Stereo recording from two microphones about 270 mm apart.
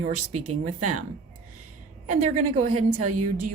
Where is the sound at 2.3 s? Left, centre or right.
Right.